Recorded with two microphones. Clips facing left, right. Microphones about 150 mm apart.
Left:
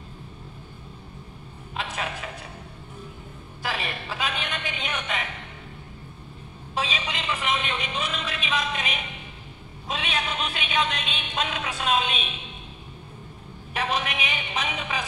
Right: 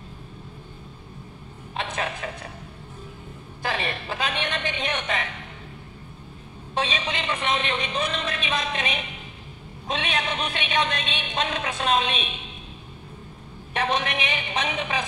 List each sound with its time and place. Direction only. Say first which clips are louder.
3.7 s a woman's voice: right 4 dB; 35° right (ahead or behind)
6.8 s a woman's voice: right 3 dB; 35° right (ahead or behind)
13.7 s a woman's voice: right 2 dB; 35° right (ahead or behind)